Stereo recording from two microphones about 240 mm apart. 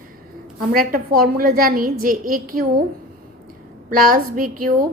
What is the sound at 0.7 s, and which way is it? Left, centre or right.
A woman's voice, right.